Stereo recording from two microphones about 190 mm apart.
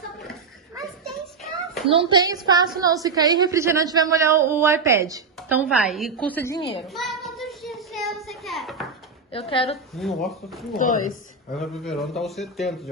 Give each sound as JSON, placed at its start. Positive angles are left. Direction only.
{"t": 1.0, "sound": "a sound", "side_deg": 0}
{"t": 1.9, "sound": "a woman's voice", "side_deg": -25}
{"t": 6.9, "sound": "child singing", "side_deg": 0}
{"t": 9.3, "sound": "a woman's voice", "side_deg": 30}
{"t": 9.9, "sound": "speech", "side_deg": 0}